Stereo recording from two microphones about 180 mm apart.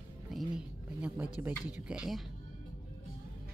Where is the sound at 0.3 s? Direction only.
Centre (ahead or behind).